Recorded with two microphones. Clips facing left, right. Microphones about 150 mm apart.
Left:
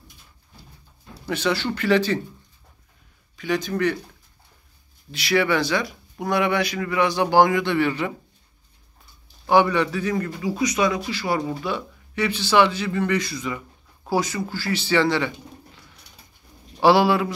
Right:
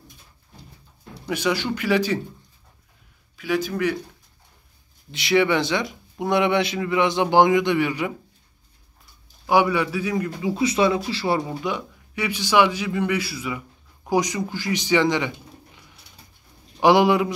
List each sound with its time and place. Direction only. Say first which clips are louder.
1.3 s speech: even; 10° right (ahead or behind)
3.3 s speech: even; 5° right (ahead or behind)
5.1 s speech: right 2 dB; 20° right (ahead or behind)
9.5 s speech: left 1 dB; 10° right (ahead or behind)
10.4 s a man's voice: right 2 dB; 25° right (ahead or behind)
16.8 s speech: right 1 dB; 20° right (ahead or behind)